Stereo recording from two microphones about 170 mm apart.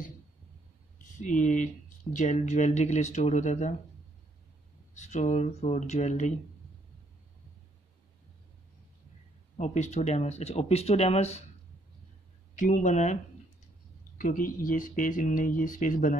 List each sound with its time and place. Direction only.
1.2 s speech: 50° left (ahead or behind)
4.9 s speech: 45° left (ahead or behind)
9.6 s speech: 40° left (ahead or behind)
12.5 s speech: 45° left (ahead or behind)